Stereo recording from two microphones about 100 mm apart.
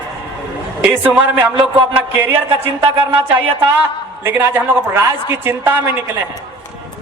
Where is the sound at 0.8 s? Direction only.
15° right (ahead or behind).